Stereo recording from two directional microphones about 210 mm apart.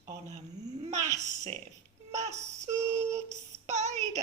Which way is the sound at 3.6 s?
35° right (ahead or behind).